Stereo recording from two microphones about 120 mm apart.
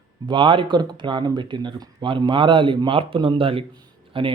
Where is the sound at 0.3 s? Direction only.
40° right (ahead or behind).